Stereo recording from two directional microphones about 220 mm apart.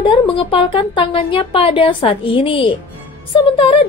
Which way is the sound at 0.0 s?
25° left (ahead or behind).